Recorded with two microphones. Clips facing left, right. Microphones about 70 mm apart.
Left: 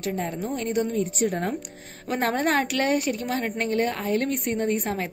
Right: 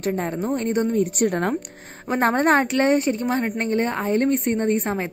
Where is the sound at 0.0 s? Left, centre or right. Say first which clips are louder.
Right 4 dB; right.